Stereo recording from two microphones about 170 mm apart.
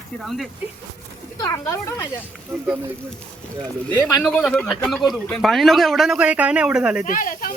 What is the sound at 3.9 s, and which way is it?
Speech, 5° left (ahead or behind).